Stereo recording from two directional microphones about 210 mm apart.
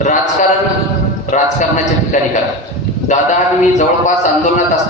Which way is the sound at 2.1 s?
35° left (ahead or behind).